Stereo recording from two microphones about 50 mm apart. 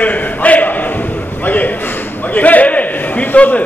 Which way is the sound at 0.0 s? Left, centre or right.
Left.